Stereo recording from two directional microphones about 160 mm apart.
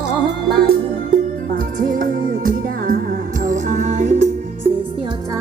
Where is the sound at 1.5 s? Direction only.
60° right (ahead or behind).